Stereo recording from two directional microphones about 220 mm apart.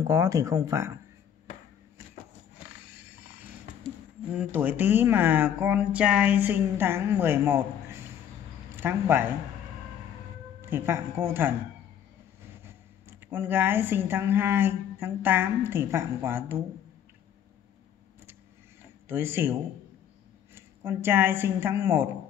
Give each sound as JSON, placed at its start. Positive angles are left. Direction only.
{"t": 0.0, "sound": "speech", "side_deg": -15}
{"t": 4.3, "sound": "speech", "side_deg": -5}
{"t": 10.6, "sound": "speech", "side_deg": -10}
{"t": 13.3, "sound": "speech", "side_deg": -10}
{"t": 19.0, "sound": "speech", "side_deg": -10}
{"t": 20.5, "sound": "a woman's voice", "side_deg": -10}